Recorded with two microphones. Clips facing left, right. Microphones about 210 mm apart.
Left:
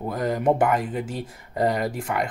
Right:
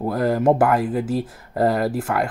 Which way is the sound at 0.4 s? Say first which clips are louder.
Right 3 dB; 5° right (ahead or behind).